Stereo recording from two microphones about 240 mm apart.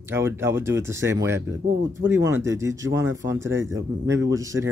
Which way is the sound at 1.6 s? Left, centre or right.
Right.